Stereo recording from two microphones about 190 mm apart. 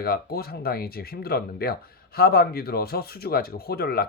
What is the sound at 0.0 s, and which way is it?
Speech, 55° left (ahead or behind).